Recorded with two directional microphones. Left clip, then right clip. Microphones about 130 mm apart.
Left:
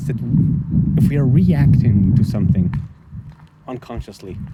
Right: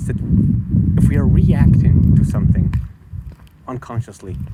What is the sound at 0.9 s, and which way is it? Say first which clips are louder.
Speech: left 1 dB; 30° left (ahead or behind).